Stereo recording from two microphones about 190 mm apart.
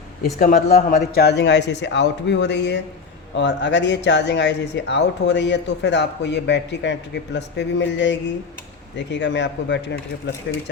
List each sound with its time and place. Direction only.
0.3 s speech: 50° left (ahead or behind); by 10.3 s 65° left (ahead or behind)